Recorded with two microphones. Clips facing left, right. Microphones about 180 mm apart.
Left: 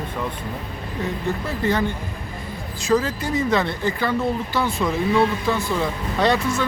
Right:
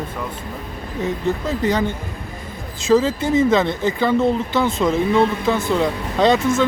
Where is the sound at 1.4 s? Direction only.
20° right (ahead or behind).